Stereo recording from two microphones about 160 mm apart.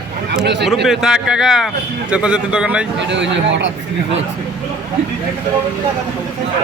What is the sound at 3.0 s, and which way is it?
Speech, 90° right.